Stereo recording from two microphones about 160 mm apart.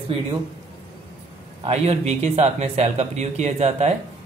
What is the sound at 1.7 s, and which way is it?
A man's voice, 40° right (ahead or behind).